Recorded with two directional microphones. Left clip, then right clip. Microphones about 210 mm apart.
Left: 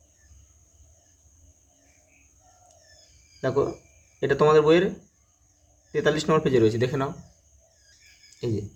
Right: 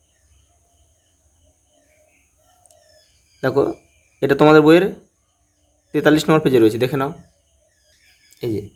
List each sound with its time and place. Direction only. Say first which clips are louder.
3.4 s speech: right 7 dB; 35° right (ahead or behind)
5.9 s speech: right 7 dB; 40° right (ahead or behind)
8.4 s speech: right 6 dB; 30° right (ahead or behind)